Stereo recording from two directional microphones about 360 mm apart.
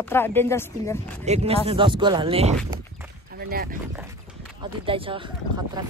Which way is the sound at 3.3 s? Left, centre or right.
Right.